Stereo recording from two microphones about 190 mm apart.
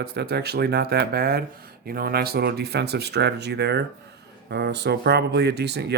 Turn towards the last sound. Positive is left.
turn(degrees=-60)  # may be behind; listen again after turning